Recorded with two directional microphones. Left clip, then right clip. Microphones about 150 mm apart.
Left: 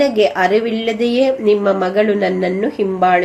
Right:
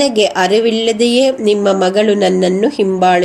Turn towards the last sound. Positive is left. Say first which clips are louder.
# right 2 dB
turn(degrees=-30)  # may be behind; listen again after turning